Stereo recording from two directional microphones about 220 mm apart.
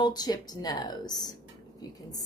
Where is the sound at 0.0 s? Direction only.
20° left (ahead or behind).